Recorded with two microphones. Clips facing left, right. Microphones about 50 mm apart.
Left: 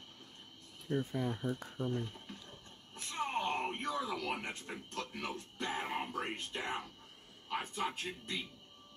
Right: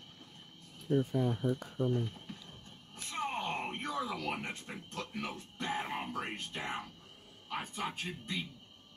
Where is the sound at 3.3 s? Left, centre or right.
Centre.